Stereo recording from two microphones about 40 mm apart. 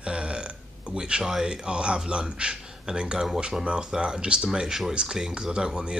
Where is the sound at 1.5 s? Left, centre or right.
Right.